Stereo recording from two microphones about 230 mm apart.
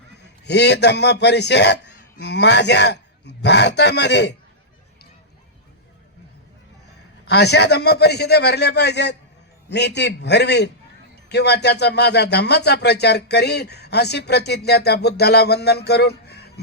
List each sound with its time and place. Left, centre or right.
0.2 s a man's voice: left
7.3 s speech: left